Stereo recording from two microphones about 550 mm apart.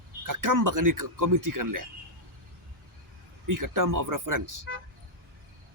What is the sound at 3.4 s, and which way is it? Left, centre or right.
Speech, right.